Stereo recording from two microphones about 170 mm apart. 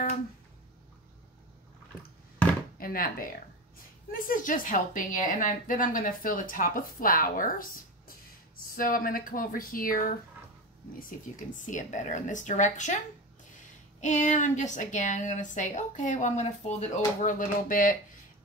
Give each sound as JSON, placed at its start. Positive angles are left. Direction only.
{"t": 2.8, "sound": "a woman's voice", "side_deg": 55}
{"t": 8.7, "sound": "a woman's voice", "side_deg": 55}
{"t": 14.0, "sound": "a woman's voice", "side_deg": 45}
{"t": 17.2, "sound": "a woman's voice", "side_deg": 50}